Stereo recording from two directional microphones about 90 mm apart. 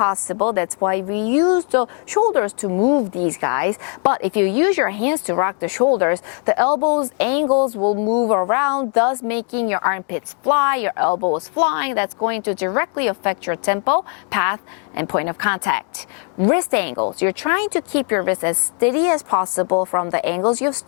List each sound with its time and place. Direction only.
0.0 s speech: 20° left (ahead or behind)
7.2 s speech: 15° left (ahead or behind)
7.4 s speech: 25° left (ahead or behind)
11.6 s speech: 15° left (ahead or behind)